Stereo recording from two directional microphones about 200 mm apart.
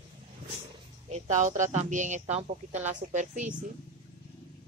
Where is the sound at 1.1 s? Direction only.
35° right (ahead or behind).